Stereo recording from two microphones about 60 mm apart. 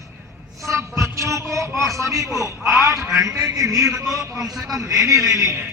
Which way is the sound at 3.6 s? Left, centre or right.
Right.